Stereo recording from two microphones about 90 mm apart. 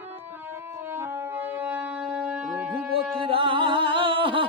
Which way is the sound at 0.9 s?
30° right (ahead or behind).